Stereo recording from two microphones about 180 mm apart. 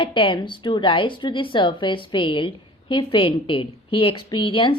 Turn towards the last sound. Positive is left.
turn(degrees=30)  # may be behind; listen again after turning